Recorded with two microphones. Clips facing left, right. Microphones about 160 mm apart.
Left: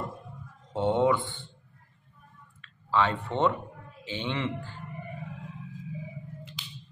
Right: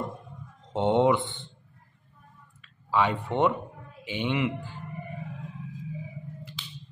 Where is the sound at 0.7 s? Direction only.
20° right (ahead or behind).